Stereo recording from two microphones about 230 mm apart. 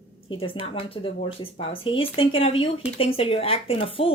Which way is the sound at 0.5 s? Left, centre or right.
Left.